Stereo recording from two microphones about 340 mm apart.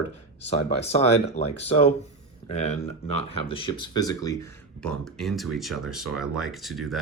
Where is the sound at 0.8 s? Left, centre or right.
Centre.